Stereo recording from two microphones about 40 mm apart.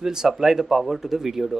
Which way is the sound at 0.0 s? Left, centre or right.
Centre.